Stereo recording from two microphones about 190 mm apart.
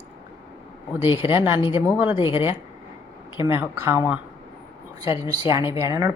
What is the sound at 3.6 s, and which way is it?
Speech, 15° right (ahead or behind).